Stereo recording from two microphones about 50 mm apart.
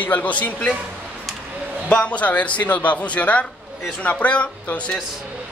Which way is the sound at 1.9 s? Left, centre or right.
Left.